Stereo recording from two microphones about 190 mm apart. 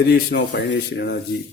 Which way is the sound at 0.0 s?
60° left (ahead or behind).